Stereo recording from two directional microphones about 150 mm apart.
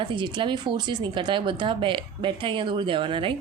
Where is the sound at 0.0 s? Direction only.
30° right (ahead or behind).